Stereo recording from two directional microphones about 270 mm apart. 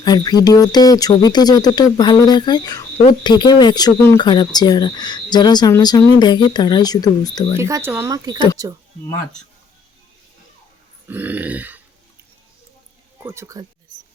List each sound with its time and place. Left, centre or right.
0.0 s speech: centre
7.5 s speech: centre
11.1 s speech: centre
13.2 s speech: centre